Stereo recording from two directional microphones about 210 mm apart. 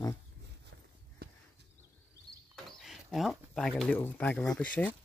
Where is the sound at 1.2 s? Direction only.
50° right (ahead or behind).